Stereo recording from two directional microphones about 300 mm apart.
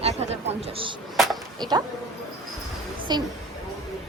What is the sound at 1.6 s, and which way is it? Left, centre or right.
Speech, centre.